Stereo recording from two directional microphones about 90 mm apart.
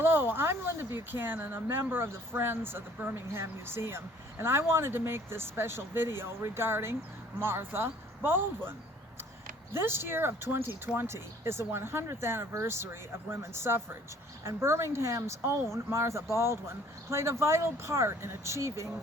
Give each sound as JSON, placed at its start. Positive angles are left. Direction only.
{"t": 0.0, "sound": "speech", "side_deg": -25}
{"t": 9.7, "sound": "speech", "side_deg": -25}